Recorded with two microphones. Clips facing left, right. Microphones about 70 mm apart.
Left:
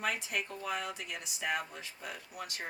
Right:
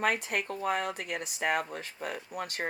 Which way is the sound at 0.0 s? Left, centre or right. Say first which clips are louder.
Right 6 dB; right.